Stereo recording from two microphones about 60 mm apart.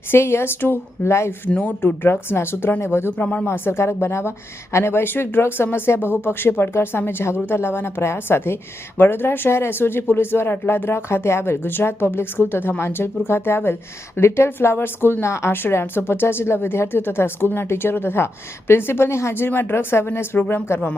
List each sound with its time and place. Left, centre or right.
0.1 s a woman's voice: left
1.5 s speech: left
2.0 s speech: left
3.2 s speech: left
3.4 s a woman's voice: left